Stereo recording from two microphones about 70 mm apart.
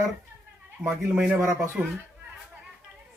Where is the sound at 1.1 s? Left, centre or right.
Centre.